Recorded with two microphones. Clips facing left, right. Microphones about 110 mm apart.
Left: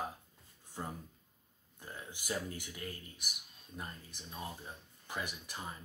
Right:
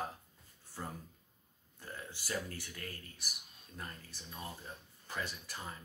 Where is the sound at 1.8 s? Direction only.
15° left (ahead or behind).